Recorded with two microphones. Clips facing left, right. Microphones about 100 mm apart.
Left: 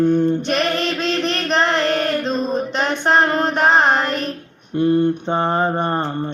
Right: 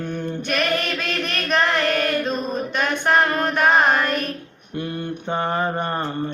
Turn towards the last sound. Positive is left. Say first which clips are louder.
# left 4 dB
turn(degrees=30)  # may be behind; listen again after turning